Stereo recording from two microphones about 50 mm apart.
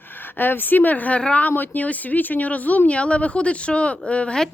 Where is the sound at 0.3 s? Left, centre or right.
Left.